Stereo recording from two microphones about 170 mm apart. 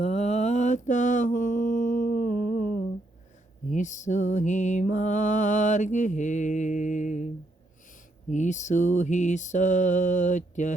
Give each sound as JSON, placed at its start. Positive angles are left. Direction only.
{"t": 0.0, "sound": "mantra", "side_deg": 40}
{"t": 3.7, "sound": "mantra", "side_deg": 45}
{"t": 8.3, "sound": "mantra", "side_deg": 45}